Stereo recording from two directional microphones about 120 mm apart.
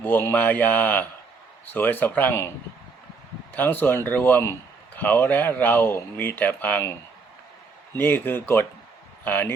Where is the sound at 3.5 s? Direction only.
15° left (ahead or behind).